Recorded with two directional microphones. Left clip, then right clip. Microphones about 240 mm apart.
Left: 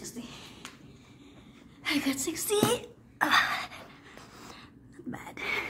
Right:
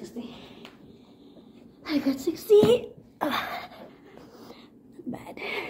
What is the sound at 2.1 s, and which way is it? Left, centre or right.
Speech, left.